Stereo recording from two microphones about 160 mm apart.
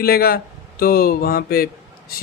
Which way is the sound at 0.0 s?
75° left (ahead or behind).